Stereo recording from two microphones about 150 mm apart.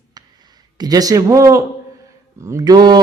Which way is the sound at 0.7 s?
25° right (ahead or behind).